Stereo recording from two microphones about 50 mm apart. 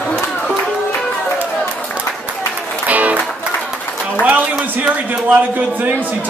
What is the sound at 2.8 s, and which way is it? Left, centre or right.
Music, right.